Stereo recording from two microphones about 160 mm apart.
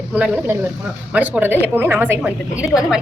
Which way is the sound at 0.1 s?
10° right (ahead or behind).